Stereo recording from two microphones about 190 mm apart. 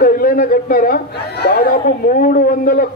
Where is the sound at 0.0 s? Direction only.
50° left (ahead or behind).